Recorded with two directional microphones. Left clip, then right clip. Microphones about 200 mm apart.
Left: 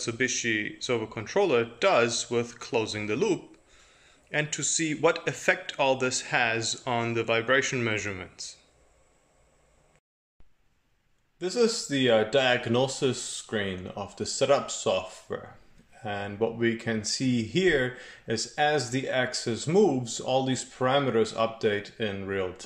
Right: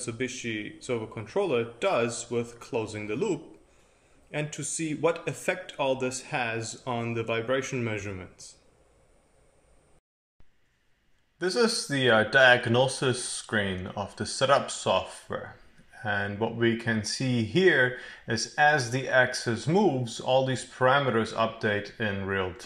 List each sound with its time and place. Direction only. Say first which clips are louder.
0.0 s speech: left 5 dB; 5° right (ahead or behind)
11.3 s speech: even; 20° left (ahead or behind)